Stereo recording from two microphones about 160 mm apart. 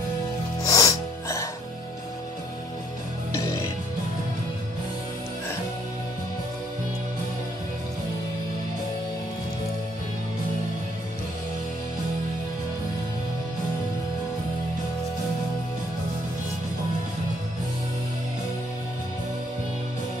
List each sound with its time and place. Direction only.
0.7 s music: 20° left (ahead or behind)